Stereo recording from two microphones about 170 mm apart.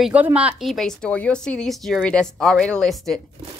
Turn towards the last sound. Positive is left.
turn(degrees=0)  # may be behind; listen again after turning